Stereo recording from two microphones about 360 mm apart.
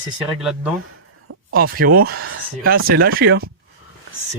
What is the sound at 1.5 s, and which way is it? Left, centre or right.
Speech, right.